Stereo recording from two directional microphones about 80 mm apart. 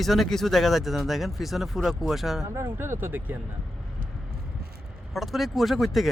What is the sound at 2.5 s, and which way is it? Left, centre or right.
Speech, right.